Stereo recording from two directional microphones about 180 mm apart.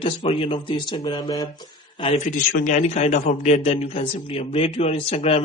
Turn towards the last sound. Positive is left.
turn(degrees=35)  # may be behind; listen again after turning